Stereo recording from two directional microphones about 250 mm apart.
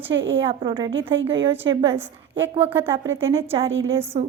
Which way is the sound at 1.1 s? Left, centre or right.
Right.